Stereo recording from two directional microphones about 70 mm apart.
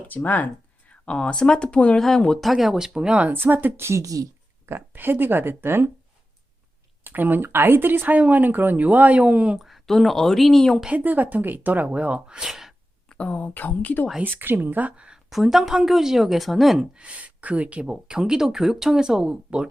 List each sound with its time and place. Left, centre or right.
0.1 s speech: left
2.4 s speech: centre
3.4 s speech: right
4.0 s speech: right
4.6 s speech: right
7.0 s speech: right
9.6 s a woman's voice: centre
10.8 s speech: right; by 12.7 s centre
13.1 s speech: centre
14.3 s speech: right
15.3 s a woman's voice: centre
16.9 s speech: centre